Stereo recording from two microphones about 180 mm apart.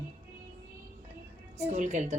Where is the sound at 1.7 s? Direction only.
45° right (ahead or behind).